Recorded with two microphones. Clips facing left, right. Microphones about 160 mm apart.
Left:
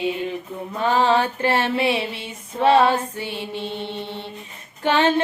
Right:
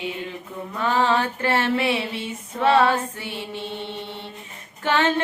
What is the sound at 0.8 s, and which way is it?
Mantra, 20° left (ahead or behind).